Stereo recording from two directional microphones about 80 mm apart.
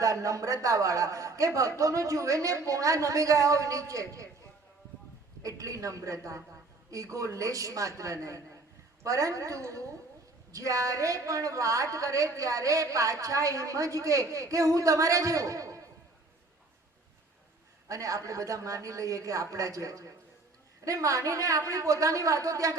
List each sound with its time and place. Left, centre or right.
0.0 s a woman's voice: right
5.4 s a woman's voice: right
17.8 s a woman's voice: right